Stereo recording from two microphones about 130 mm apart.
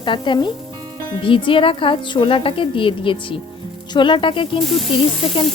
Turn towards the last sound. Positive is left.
turn(degrees=45)  # may be behind; listen again after turning